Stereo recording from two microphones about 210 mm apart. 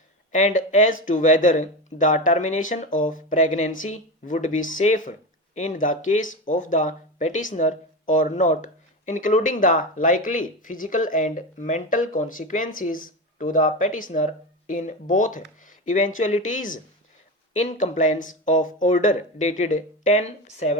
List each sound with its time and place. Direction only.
0.3 s speech: 35° left (ahead or behind)